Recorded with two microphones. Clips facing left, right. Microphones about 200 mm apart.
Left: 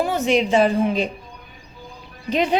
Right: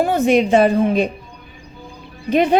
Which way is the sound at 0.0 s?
55° right (ahead or behind).